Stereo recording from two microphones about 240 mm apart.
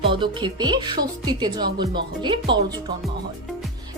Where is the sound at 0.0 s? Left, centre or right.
Centre.